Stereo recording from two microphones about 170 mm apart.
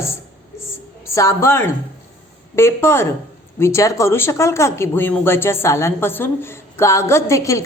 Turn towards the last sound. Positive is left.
turn(degrees=15)  # may be behind; listen again after turning